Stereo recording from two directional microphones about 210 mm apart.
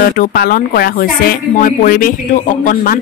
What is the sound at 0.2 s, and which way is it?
Speech, 45° left (ahead or behind).